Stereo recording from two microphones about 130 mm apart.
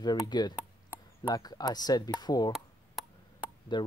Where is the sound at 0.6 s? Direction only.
15° right (ahead or behind).